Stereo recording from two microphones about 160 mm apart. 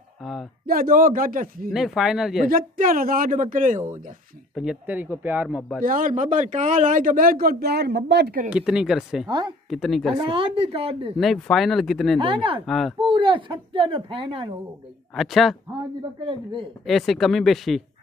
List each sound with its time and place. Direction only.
0.2 s speech: centre (ahead or behind)
0.7 s speech: 60° right (ahead or behind)
1.7 s speech: centre (ahead or behind)
2.4 s speech: 60° right (ahead or behind)
4.6 s speech: 5° right (ahead or behind)
5.8 s speech: 55° right (ahead or behind); by 8.5 s 80° right
8.5 s speech: 5° right (ahead or behind)
10.2 s speech: 35° right (ahead or behind)
11.1 s speech: centre (ahead or behind)
12.2 s speech: 35° right (ahead or behind)
12.6 s speech: centre (ahead or behind)
13.0 s speech: 35° right (ahead or behind)
15.1 s speech: centre (ahead or behind)
16.8 s speech: centre (ahead or behind)